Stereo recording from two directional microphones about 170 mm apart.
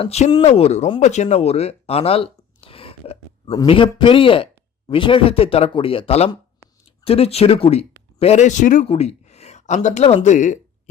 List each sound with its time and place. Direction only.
0.0 s speech: 35° left (ahead or behind)